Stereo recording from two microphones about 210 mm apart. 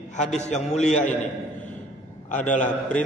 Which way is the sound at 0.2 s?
35° left (ahead or behind).